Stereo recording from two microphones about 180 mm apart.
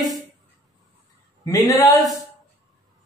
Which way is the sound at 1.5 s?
20° left (ahead or behind).